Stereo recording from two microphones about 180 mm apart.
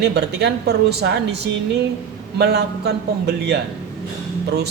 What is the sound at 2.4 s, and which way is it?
Speech, 65° right (ahead or behind).